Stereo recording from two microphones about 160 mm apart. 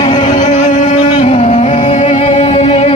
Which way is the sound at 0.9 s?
35° left (ahead or behind).